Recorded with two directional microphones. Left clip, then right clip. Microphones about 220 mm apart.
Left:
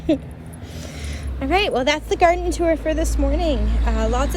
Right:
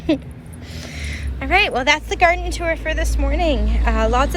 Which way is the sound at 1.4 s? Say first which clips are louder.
Right 2 dB; 15° left (ahead or behind).